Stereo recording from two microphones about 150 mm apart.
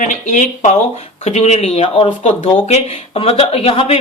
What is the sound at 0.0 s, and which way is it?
Speech, 55° left (ahead or behind).